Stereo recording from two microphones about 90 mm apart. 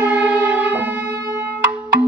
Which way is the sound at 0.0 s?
15° right (ahead or behind).